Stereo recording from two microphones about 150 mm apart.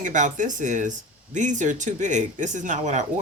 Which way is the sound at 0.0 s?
55° right (ahead or behind).